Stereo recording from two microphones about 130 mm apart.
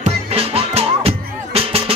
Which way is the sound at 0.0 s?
50° right (ahead or behind).